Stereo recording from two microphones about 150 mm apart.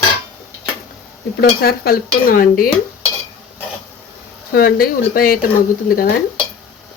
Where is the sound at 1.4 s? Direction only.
90° left; by 2.6 s 70° left (ahead or behind).